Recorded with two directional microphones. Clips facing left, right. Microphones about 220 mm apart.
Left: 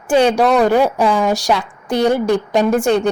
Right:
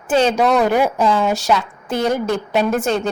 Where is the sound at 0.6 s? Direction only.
10° right (ahead or behind).